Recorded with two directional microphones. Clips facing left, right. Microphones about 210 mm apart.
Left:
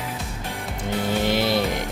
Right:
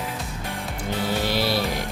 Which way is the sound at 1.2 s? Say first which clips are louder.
Left 4 dB; 20° left (ahead or behind).